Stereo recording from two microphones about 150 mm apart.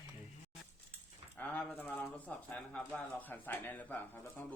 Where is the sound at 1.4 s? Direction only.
10° left (ahead or behind).